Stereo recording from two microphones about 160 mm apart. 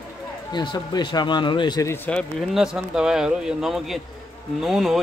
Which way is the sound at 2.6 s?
5° right (ahead or behind).